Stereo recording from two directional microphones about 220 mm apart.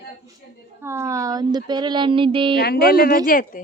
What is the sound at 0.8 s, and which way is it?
Speech, 10° right (ahead or behind).